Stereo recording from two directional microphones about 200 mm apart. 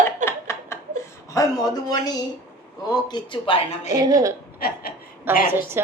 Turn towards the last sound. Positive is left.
turn(degrees=-10)  # may be behind; listen again after turning